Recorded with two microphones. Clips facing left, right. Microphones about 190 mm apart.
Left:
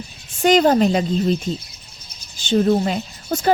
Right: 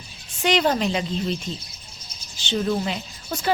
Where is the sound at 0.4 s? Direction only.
45° left (ahead or behind).